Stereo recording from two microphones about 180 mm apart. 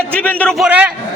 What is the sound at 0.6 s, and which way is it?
Speech, 10° right (ahead or behind).